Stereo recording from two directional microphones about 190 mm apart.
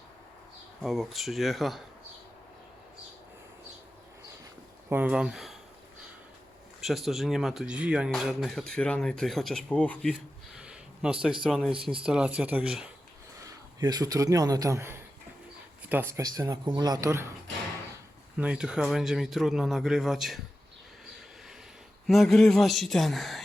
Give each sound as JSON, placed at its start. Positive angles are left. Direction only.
{"t": 0.8, "sound": "speech", "side_deg": 0}
{"t": 4.9, "sound": "speech", "side_deg": -10}
{"t": 6.8, "sound": "speech", "side_deg": 0}
{"t": 10.6, "sound": "a sound", "side_deg": -5}
{"t": 11.4, "sound": "speech", "side_deg": -5}
{"t": 13.7, "sound": "speech", "side_deg": -20}
{"t": 18.3, "sound": "speech", "side_deg": -5}
{"t": 22.0, "sound": "speech", "side_deg": 0}